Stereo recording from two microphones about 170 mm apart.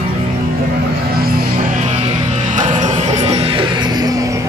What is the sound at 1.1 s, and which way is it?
Music, 60° right (ahead or behind).